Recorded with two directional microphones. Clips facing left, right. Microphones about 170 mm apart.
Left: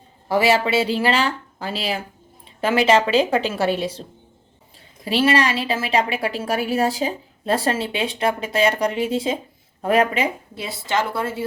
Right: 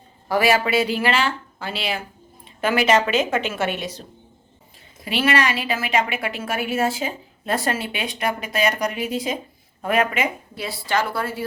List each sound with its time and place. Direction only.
0.3 s speech: 25° left (ahead or behind)
5.0 s a woman's voice: 30° left (ahead or behind)